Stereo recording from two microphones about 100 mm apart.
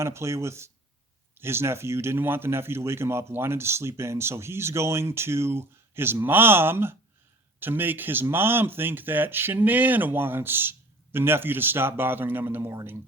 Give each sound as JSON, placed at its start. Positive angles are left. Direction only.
{"t": 0.0, "sound": "speech", "side_deg": -25}